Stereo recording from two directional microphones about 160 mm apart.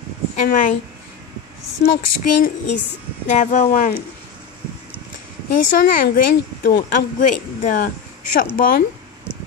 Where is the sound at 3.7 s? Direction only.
60° left (ahead or behind).